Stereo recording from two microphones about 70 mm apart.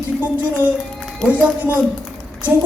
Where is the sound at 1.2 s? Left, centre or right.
Centre.